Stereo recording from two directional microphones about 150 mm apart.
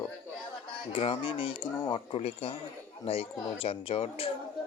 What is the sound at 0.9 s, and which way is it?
Speech, 35° left (ahead or behind).